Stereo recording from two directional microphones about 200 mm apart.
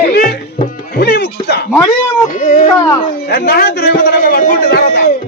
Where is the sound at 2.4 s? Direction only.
40° left (ahead or behind).